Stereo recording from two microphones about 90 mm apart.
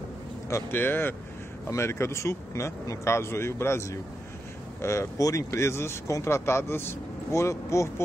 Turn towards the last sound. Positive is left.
turn(degrees=35)  # may be behind; listen again after turning